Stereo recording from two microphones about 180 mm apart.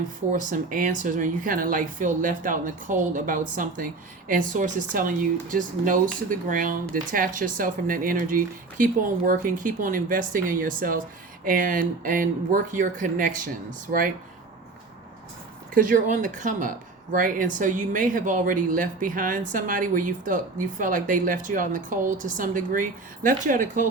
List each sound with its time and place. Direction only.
0.3 s speech: 45° right (ahead or behind)
15.7 s speech: 50° right (ahead or behind)